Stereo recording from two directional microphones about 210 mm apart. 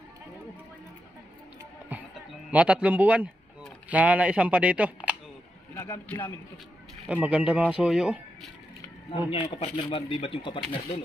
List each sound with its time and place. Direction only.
1.9 s music: 5° right (ahead or behind)
2.5 s speech: 5° right (ahead or behind)
5.8 s a man's voice: 10° left (ahead or behind)
7.1 s speech: 5° right (ahead or behind)
9.3 s speech: 25° left (ahead or behind)